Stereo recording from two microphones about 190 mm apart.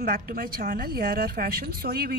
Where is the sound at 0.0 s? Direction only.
50° right (ahead or behind).